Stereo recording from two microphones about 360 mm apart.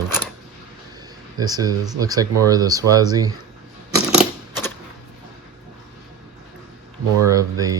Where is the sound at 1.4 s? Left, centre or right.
Centre.